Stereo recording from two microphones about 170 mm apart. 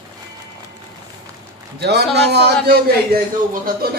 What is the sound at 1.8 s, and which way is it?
Speech, 75° right (ahead or behind).